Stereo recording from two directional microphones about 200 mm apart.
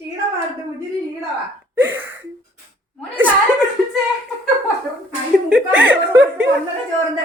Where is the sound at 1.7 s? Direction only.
10° right (ahead or behind).